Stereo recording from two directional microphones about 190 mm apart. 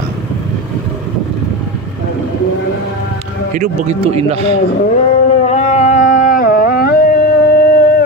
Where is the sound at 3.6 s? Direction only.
35° right (ahead or behind).